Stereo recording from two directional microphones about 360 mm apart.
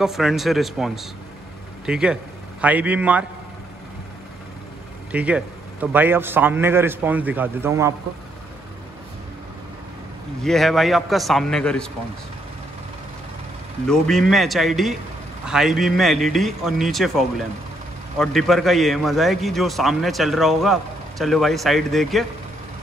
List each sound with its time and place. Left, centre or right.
0.0 s a man's voice: centre
5.1 s a man's voice: centre
10.4 s a man's voice: centre
13.8 s a man's voice: centre
18.2 s a man's voice: centre